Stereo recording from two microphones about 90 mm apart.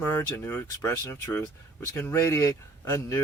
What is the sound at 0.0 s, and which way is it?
Speech, 25° left (ahead or behind).